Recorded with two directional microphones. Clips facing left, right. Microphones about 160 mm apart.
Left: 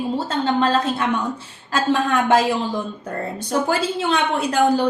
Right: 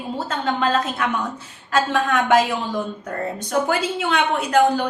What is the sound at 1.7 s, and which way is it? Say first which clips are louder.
Speech: left 1 dB; 30° left (ahead or behind).